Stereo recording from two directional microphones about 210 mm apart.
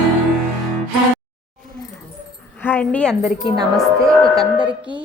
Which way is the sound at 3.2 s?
20° right (ahead or behind).